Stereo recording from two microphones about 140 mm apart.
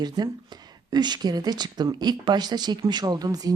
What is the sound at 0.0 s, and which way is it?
Speech, 30° right (ahead or behind).